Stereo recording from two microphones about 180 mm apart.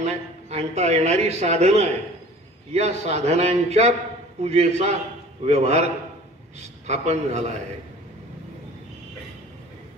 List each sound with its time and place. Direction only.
0.0 s speech: 40° right (ahead or behind)
6.9 s speech: 40° right (ahead or behind)